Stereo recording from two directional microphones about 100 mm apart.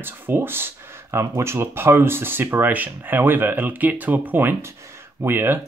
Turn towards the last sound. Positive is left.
turn(degrees=-20)  # may be behind; listen again after turning